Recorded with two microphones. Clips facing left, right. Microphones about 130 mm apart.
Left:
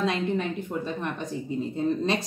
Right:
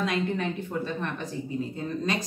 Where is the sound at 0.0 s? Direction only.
25° left (ahead or behind).